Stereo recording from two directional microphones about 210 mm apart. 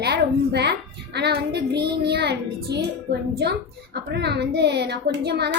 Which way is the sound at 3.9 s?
55° right (ahead or behind).